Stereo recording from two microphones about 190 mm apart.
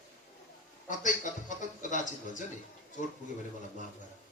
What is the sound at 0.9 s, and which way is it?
Speech, 40° left (ahead or behind).